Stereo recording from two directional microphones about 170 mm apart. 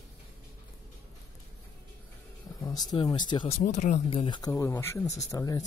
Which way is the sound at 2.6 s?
25° left (ahead or behind).